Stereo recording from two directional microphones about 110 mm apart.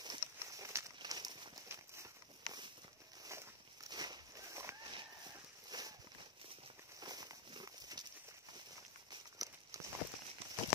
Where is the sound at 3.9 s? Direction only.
40° right (ahead or behind).